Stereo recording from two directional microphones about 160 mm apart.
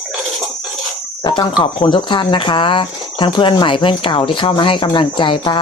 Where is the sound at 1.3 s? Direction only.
25° left (ahead or behind).